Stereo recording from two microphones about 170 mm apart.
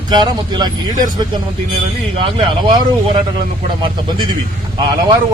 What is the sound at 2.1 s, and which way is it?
Speech, 30° right (ahead or behind).